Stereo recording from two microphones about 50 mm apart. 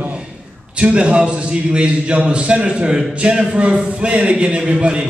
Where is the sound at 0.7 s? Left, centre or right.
Right.